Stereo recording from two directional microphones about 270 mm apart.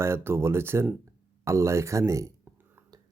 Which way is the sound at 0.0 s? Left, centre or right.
Centre.